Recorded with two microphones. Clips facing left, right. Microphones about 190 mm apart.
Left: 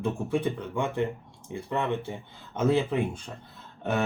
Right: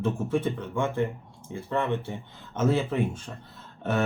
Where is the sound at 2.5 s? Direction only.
15° left (ahead or behind).